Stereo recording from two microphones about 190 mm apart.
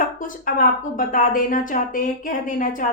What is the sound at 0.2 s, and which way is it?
A woman's voice, 45° left (ahead or behind).